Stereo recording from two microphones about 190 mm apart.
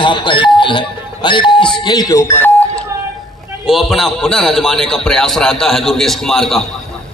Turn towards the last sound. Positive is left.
turn(degrees=0)  # may be behind; listen again after turning